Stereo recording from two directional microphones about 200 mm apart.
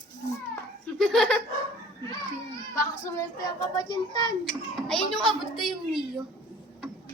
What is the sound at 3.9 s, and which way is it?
Speech, 20° left (ahead or behind).